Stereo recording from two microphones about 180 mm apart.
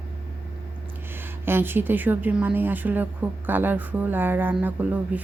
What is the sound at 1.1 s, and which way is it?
A woman's voice, 10° right (ahead or behind).